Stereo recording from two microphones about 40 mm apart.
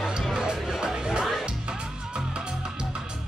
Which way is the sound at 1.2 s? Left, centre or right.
Centre.